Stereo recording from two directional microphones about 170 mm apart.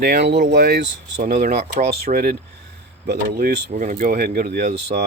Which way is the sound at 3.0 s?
70° right (ahead or behind).